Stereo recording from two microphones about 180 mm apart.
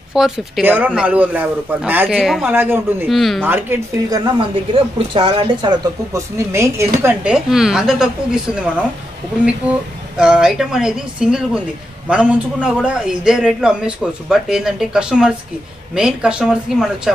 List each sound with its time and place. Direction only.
0.1 s a man's voice: centre (ahead or behind)
2.4 s speech: 10° right (ahead or behind)
3.1 s a man's voice: centre (ahead or behind)
3.4 s speech: 10° right (ahead or behind)
4.1 s speech: 25° right (ahead or behind); by 8.8 s 5° right (ahead or behind)
10.1 s a man's voice: 5° right (ahead or behind)